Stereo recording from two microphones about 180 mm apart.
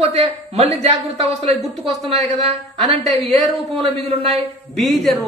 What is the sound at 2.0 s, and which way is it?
Speech, 35° right (ahead or behind).